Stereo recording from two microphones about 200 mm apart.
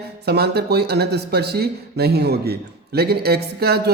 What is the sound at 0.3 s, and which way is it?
Speech, 55° right (ahead or behind).